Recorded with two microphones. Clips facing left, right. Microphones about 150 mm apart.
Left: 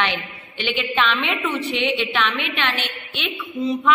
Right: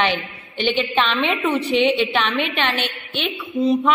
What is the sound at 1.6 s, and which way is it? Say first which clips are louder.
Speech: right 5 dB; centre (ahead or behind).